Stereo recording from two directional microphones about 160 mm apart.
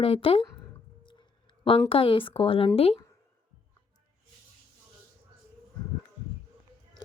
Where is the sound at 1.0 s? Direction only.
30° left (ahead or behind).